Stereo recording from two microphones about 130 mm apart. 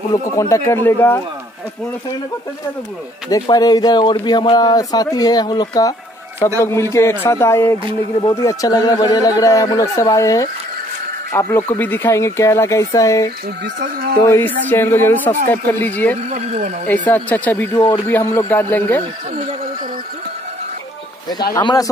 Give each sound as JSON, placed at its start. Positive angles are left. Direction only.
{"t": 0.1, "sound": "speech", "side_deg": 25}
{"t": 3.3, "sound": "speech", "side_deg": 30}
{"t": 16.3, "sound": "speech", "side_deg": -55}
{"t": 17.1, "sound": "speech", "side_deg": 15}
{"t": 17.7, "sound": "speech", "side_deg": 30}
{"t": 18.0, "sound": "speech", "side_deg": 20}
{"t": 21.3, "sound": "speech", "side_deg": 30}